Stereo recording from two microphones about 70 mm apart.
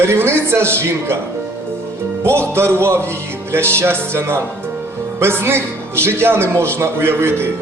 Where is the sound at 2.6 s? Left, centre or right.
Right.